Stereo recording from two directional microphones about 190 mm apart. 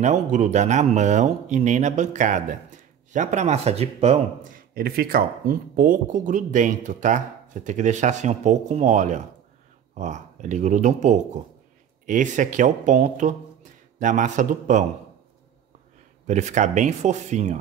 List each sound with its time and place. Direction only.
0.0 s speech: 40° right (ahead or behind)
16.3 s speech: 40° right (ahead or behind)